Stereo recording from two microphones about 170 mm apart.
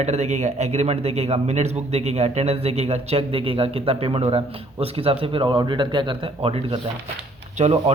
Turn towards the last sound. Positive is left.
turn(degrees=-40)  # may be behind; listen again after turning